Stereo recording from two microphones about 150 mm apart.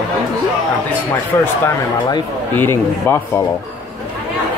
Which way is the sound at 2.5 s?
15° left (ahead or behind).